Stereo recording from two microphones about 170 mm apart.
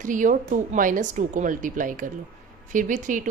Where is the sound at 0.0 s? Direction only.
50° right (ahead or behind).